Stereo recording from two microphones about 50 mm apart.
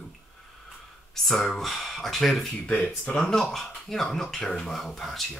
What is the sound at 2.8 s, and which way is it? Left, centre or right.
Speech, left.